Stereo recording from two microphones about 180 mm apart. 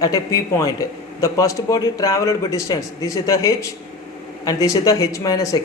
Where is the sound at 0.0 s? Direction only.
20° left (ahead or behind).